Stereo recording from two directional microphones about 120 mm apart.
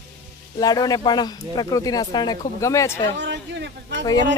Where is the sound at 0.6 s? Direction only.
30° left (ahead or behind).